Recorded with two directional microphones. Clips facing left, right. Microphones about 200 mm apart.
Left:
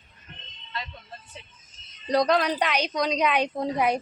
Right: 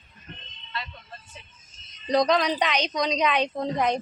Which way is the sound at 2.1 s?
5° left (ahead or behind).